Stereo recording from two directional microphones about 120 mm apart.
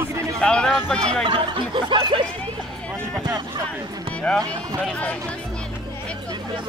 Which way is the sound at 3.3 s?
35° right (ahead or behind).